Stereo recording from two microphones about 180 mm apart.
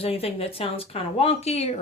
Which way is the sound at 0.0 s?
35° left (ahead or behind).